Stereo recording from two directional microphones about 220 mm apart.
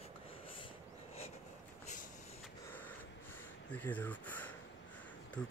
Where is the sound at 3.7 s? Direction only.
10° left (ahead or behind).